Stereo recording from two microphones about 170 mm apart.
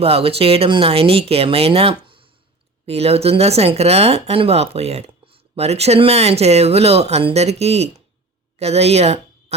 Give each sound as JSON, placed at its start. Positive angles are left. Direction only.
{"t": 0.0, "sound": "speech", "side_deg": -35}